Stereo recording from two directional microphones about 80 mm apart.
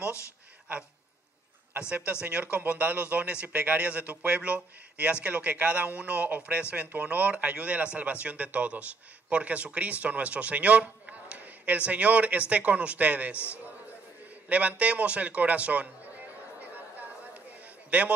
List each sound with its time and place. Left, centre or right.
1.8 s a man's voice: centre
14.5 s a man's voice: centre
17.8 s a man's voice: centre